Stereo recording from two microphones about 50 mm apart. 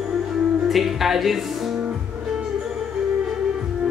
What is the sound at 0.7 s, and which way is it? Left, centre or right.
Speech, centre.